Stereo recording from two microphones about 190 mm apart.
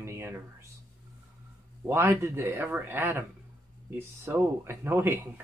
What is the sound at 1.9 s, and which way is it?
Speech, 10° right (ahead or behind).